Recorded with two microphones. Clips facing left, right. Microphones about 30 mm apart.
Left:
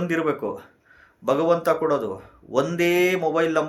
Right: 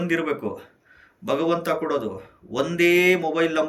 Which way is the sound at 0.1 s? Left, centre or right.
Right.